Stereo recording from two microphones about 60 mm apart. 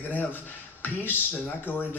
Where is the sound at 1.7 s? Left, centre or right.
Left.